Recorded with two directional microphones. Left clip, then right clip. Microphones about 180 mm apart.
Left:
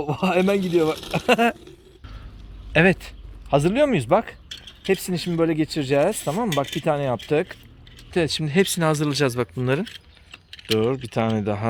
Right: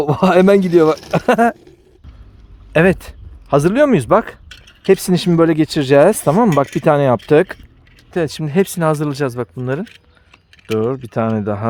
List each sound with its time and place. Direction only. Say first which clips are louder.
0.0 s speech: right 9 dB; 75° right (ahead or behind); by 1.5 s 55° right (ahead or behind)
2.7 s speech: right 5 dB; 50° right (ahead or behind)
9.6 s speech: right 2 dB; 25° right (ahead or behind)
11.0 s speech: right 5 dB; 40° right (ahead or behind)